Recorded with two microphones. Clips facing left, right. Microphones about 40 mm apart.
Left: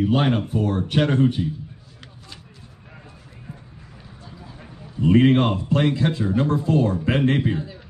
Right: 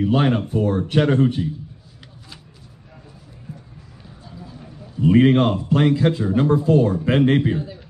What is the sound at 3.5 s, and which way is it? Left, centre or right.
Run, left.